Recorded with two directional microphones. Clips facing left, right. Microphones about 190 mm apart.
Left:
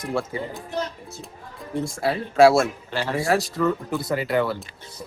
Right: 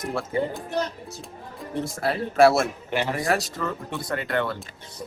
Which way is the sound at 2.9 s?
15° right (ahead or behind).